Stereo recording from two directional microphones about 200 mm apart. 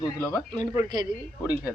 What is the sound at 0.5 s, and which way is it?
Speech, 20° right (ahead or behind).